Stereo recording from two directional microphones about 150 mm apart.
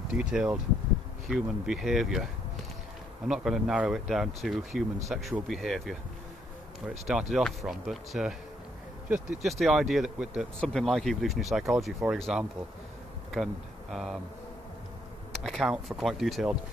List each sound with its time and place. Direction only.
0.1 s speech: 5° right (ahead or behind)
3.3 s speech: 5° right (ahead or behind)
13.9 s speech: centre (ahead or behind)
15.3 s speech: centre (ahead or behind)